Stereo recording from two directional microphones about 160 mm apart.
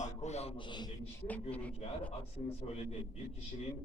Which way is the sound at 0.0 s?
45° left (ahead or behind).